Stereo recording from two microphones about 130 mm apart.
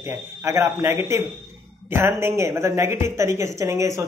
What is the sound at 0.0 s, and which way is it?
Speech, 20° right (ahead or behind).